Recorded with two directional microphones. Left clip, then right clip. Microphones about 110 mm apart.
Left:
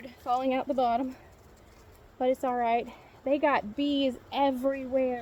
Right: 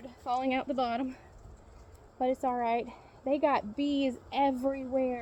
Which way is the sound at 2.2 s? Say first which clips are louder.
Left 3 dB; 20° left (ahead or behind).